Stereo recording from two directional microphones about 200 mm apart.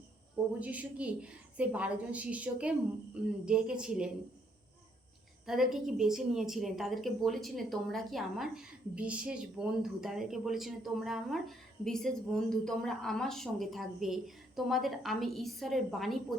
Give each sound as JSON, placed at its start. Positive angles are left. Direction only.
{"t": 0.6, "sound": "a woman's voice", "side_deg": -5}
{"t": 5.5, "sound": "a woman's voice", "side_deg": 0}